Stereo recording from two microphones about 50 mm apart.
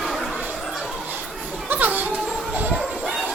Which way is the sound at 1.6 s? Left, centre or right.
Right.